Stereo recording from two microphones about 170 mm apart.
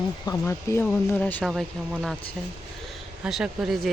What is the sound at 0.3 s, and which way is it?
Speech, 15° left (ahead or behind).